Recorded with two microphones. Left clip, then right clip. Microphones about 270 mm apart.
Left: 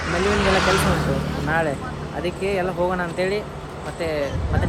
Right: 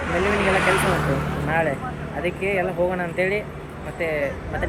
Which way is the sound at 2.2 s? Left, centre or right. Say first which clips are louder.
Even; centre.